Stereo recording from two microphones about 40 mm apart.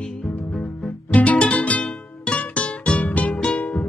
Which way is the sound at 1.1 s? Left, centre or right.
Left.